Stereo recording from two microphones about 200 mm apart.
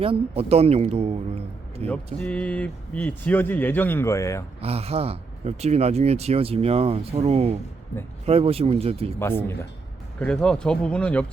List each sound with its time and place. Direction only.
0.0 s speech: 30° right (ahead or behind)
2.2 s speech: 5° left (ahead or behind)
4.6 s speech: 30° right (ahead or behind)
9.1 s speech: 10° left (ahead or behind)